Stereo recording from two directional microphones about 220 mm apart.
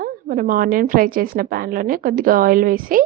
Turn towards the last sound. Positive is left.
turn(degrees=-40)  # may be behind; listen again after turning